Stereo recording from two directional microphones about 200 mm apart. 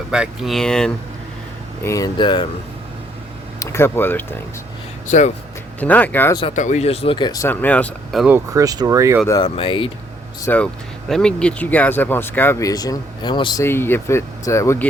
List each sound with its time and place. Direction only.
0.1 s speech: 5° right (ahead or behind)
1.8 s speech: 15° left (ahead or behind)
3.6 s speech: 15° left (ahead or behind)
5.0 s speech: 35° left (ahead or behind)
5.8 s speech: 10° left (ahead or behind)
6.6 s speech: 35° left (ahead or behind); by 8.4 s centre (ahead or behind)
8.5 s speech: 20° right (ahead or behind)
9.4 s speech: 25° left (ahead or behind)
10.4 s speech: 10° left (ahead or behind)